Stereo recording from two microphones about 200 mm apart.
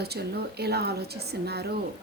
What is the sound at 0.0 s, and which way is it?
A woman's voice, 55° right (ahead or behind).